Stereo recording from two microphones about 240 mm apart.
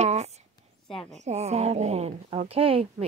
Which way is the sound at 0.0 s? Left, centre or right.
Right.